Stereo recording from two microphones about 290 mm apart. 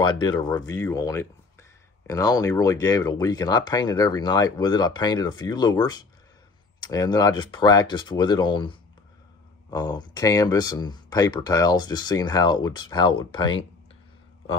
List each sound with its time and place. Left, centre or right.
0.0 s speech: centre